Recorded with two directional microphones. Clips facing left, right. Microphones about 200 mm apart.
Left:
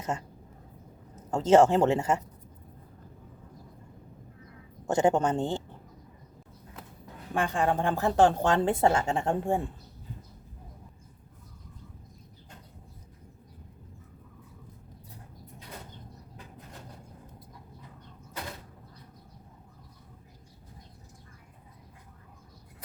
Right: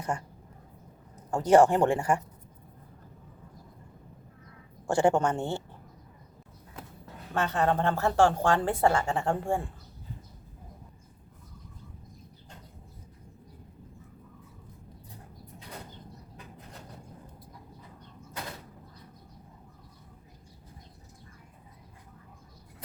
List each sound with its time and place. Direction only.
1.1 s a woman's voice: 20° left (ahead or behind)
4.9 s a woman's voice: 20° left (ahead or behind)
5.4 s speech: 10° right (ahead or behind)
7.3 s a woman's voice: 10° left (ahead or behind)